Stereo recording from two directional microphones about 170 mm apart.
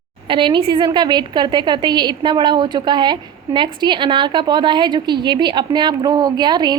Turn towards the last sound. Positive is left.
turn(degrees=-25)  # may be behind; listen again after turning